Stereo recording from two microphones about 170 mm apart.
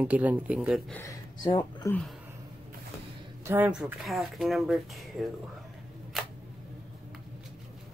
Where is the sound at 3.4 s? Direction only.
10° right (ahead or behind).